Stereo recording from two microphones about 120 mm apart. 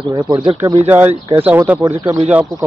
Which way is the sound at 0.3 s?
50° right (ahead or behind).